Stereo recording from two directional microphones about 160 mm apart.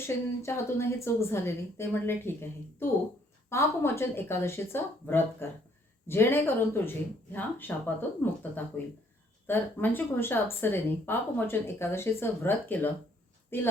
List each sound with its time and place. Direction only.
0.4 s speech: 15° left (ahead or behind)